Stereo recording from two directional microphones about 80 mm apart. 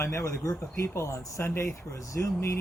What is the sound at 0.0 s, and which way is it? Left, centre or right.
Speech, left.